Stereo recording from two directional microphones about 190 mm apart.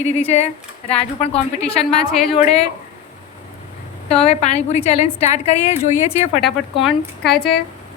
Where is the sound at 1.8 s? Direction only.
Centre (ahead or behind).